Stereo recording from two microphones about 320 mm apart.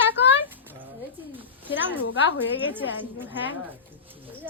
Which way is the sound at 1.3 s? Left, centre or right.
Centre.